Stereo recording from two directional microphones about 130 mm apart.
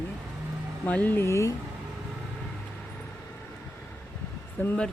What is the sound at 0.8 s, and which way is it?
Speech, 10° left (ahead or behind).